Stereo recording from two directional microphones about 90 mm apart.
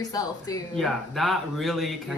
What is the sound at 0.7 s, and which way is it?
Speech, 5° left (ahead or behind).